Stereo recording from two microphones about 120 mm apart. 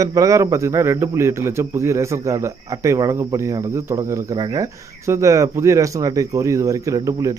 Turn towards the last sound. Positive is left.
turn(degrees=-30)  # may be behind; listen again after turning